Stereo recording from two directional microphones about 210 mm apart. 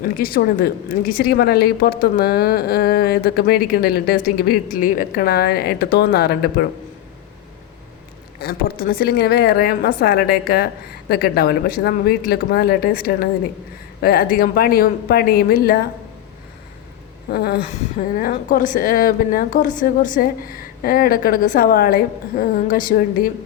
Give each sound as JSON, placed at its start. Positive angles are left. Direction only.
{"t": 0.0, "sound": "speech", "side_deg": 45}
{"t": 8.4, "sound": "speech", "side_deg": 45}
{"t": 17.3, "sound": "a woman's voice", "side_deg": 50}